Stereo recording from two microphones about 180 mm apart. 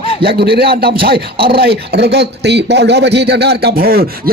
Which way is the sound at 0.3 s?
65° right (ahead or behind).